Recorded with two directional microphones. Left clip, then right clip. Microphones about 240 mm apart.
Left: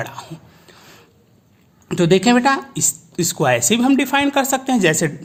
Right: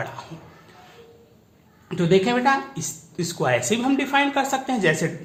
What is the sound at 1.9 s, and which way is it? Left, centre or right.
A woman's voice, left.